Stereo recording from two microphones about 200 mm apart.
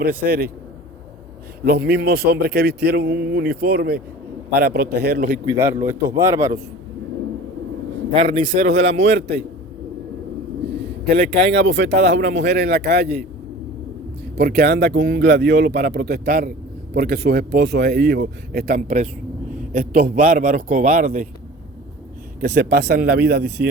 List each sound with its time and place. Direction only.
0.3 s speech: 50° right (ahead or behind)
1.6 s speech: 50° right (ahead or behind)
5.5 s speech: 15° right (ahead or behind)
8.1 s speech: 25° right (ahead or behind)
9.1 s speech: 55° right (ahead or behind)
11.8 s speech: 35° right (ahead or behind)
12.2 s speech: 60° right (ahead or behind)
14.3 s speech: 50° right (ahead or behind)
22.4 s speech: 50° right (ahead or behind)